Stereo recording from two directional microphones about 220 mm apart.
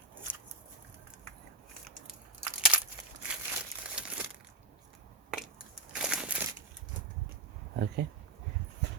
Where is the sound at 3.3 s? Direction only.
5° right (ahead or behind).